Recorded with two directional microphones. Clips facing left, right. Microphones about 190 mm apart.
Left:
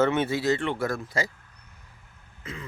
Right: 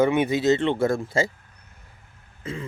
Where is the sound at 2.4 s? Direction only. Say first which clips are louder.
Right 7 dB; 30° right (ahead or behind).